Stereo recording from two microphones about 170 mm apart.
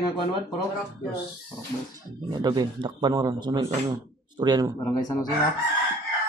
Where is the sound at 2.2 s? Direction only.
25° right (ahead or behind).